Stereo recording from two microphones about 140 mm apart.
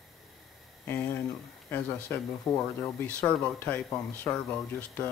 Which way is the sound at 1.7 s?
15° left (ahead or behind).